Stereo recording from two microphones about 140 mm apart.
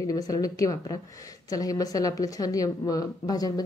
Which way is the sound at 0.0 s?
25° left (ahead or behind).